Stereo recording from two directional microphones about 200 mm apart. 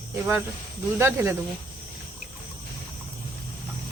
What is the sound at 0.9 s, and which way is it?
Speech, 10° right (ahead or behind).